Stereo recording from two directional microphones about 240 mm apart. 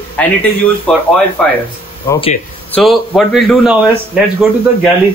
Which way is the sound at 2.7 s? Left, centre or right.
Centre.